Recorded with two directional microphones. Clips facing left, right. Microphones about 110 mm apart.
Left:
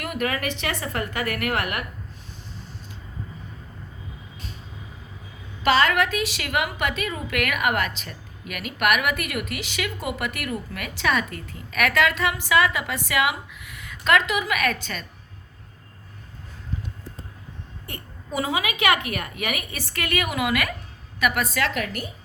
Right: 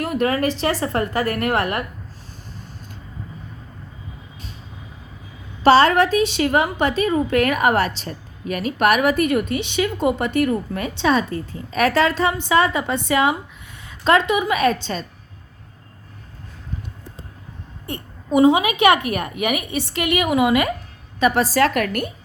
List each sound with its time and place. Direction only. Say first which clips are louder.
0.0 s a woman's voice: right 7 dB; 35° right (ahead or behind)
5.6 s a woman's voice: right 7 dB; 35° right (ahead or behind)
17.8 s a woman's voice: right 10 dB; 25° right (ahead or behind)
21.7 s a woman's voice: right 7 dB; 55° right (ahead or behind)